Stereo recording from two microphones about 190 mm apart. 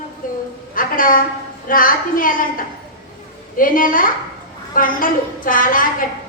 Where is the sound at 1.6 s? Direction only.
45° left (ahead or behind).